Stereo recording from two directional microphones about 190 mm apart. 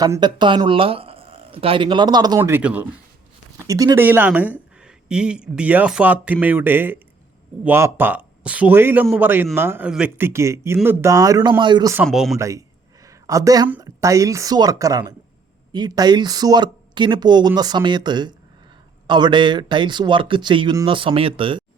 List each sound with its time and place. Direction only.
0.0 s speech: 20° right (ahead or behind)
2.4 s speech: 10° right (ahead or behind)
3.7 s speech: 20° right (ahead or behind)
12.0 s speech: centre (ahead or behind)
12.4 s a sound: 15° right (ahead or behind)
13.7 s speech: 15° right (ahead or behind)